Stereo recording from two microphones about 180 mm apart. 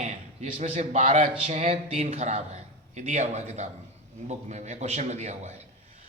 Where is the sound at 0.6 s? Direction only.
40° right (ahead or behind).